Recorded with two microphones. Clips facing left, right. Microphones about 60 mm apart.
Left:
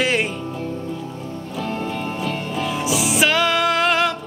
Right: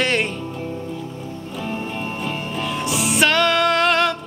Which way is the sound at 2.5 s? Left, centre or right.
Centre.